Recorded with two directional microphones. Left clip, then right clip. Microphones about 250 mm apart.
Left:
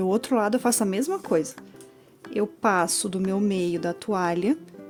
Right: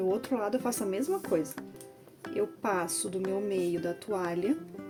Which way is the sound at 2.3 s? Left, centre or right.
Left.